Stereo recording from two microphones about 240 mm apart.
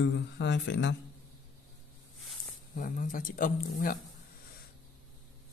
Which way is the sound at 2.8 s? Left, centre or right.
Left.